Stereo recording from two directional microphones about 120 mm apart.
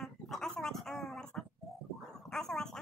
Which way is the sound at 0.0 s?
Centre (ahead or behind).